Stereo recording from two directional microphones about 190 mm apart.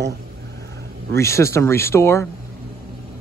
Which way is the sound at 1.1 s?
15° left (ahead or behind).